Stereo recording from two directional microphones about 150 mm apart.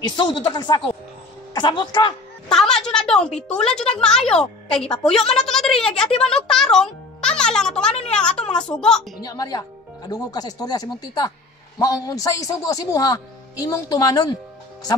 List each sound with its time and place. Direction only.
0.0 s a woman's voice: 30° left (ahead or behind)
2.5 s speech: 5° left (ahead or behind)
9.2 s speech: 25° left (ahead or behind)